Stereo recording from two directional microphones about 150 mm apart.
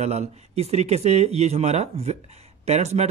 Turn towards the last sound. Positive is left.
turn(degrees=-45)  # may be behind; listen again after turning